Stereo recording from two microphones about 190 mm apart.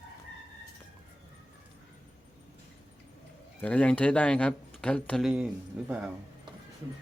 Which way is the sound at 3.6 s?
5° left (ahead or behind).